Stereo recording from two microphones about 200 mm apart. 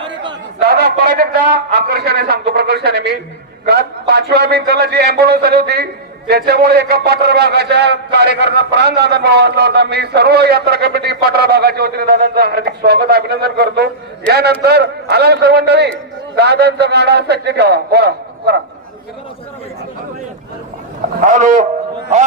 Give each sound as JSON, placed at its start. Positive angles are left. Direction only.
{"t": 0.0, "sound": "a sound", "side_deg": -25}
{"t": 0.7, "sound": "a man's voice", "side_deg": -50}
{"t": 21.2, "sound": "a man's voice", "side_deg": -40}